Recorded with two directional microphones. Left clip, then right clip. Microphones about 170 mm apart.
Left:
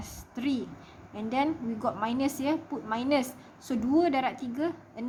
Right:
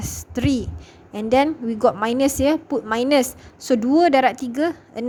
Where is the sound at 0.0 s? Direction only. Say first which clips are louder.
Right 10 dB; 45° right (ahead or behind).